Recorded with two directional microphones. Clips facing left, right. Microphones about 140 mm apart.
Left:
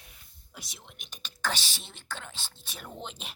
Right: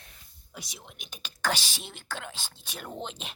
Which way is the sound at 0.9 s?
5° right (ahead or behind).